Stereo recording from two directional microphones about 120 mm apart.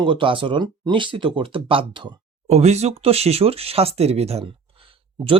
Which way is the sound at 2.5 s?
65° right (ahead or behind).